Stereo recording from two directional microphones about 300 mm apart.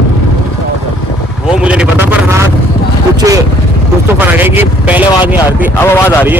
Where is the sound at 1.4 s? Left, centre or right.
Centre.